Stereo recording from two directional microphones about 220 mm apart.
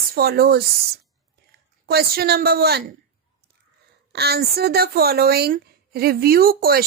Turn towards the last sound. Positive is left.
turn(degrees=-45)  # may be behind; listen again after turning